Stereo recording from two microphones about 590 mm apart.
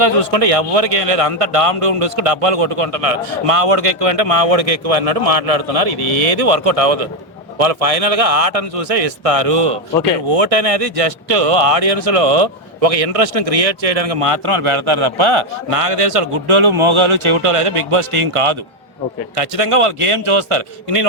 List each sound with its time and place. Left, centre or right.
0.0 s a man's voice: right